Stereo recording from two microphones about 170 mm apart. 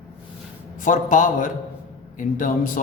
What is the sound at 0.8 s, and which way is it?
A man's voice, 50° left (ahead or behind).